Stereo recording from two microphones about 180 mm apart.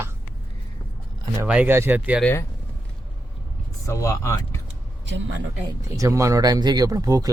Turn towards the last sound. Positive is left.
turn(degrees=-20)  # may be behind; listen again after turning